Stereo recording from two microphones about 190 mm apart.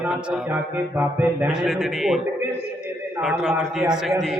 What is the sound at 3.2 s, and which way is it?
A man's voice, 5° right (ahead or behind).